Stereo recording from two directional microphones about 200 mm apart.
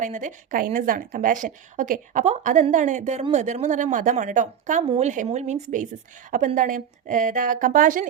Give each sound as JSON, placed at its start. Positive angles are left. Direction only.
{"t": 0.0, "sound": "a woman's voice", "side_deg": -40}